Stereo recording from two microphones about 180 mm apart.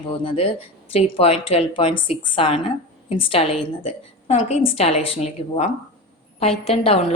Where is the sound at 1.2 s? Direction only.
35° left (ahead or behind).